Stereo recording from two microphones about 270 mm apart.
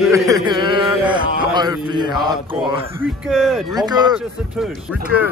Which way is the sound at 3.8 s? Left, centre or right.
Centre.